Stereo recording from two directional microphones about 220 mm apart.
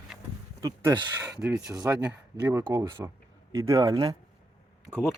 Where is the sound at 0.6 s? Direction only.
20° right (ahead or behind).